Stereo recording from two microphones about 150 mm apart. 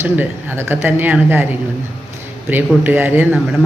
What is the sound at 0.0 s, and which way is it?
A woman's voice, 15° right (ahead or behind).